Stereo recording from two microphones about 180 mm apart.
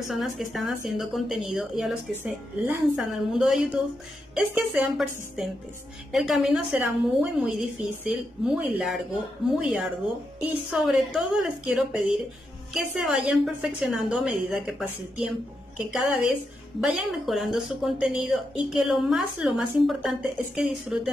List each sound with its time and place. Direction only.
0.1 s a woman's voice: centre (ahead or behind)